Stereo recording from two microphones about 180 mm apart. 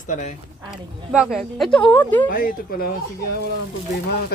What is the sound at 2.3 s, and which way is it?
Speech, 55° left (ahead or behind).